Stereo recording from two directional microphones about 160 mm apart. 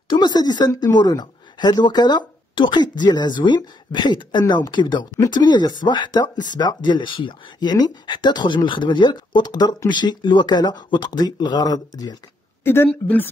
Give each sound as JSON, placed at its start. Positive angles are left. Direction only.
{"t": 0.1, "sound": "speech", "side_deg": 30}
{"t": 12.6, "sound": "a woman's voice", "side_deg": 15}